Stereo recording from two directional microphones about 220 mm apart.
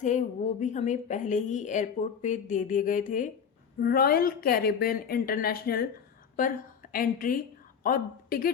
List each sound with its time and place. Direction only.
0.0 s a woman's voice: 35° left (ahead or behind)